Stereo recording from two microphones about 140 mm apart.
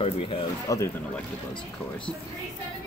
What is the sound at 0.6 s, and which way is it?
Speech, 20° left (ahead or behind).